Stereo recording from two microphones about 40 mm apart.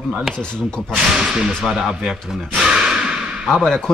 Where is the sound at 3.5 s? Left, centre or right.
Centre.